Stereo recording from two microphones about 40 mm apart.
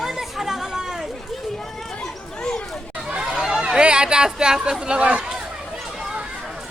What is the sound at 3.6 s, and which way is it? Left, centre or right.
Speech, right.